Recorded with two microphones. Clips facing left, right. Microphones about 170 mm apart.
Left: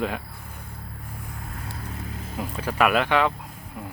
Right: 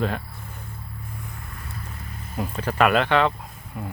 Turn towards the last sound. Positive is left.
turn(degrees=0)  # may be behind; listen again after turning